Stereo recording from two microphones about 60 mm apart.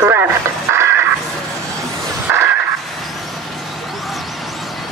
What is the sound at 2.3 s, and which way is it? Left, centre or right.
Vehicle, right.